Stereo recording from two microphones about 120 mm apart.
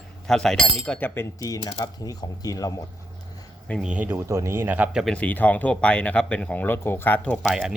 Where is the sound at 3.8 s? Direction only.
10° right (ahead or behind).